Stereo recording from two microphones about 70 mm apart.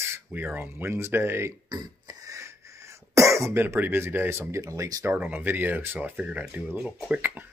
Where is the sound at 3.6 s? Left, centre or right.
Right.